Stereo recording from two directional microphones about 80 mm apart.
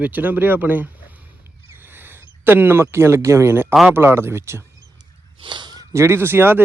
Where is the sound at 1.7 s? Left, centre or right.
Right.